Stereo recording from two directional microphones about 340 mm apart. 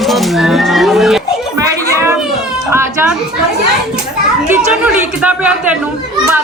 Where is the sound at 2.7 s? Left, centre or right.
Centre.